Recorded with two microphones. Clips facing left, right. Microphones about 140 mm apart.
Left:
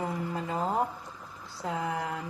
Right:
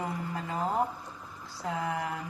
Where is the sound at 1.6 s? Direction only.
25° left (ahead or behind).